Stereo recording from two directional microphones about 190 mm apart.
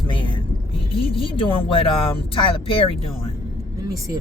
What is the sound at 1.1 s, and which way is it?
Speech, 30° left (ahead or behind).